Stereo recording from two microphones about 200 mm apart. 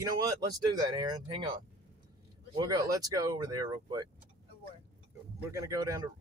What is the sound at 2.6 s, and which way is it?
Speech, 15° right (ahead or behind).